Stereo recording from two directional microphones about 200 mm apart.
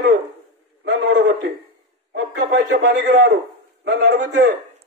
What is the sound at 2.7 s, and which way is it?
A man's voice, 55° right (ahead or behind).